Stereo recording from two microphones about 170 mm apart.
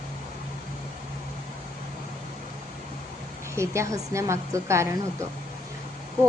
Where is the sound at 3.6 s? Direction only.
15° right (ahead or behind).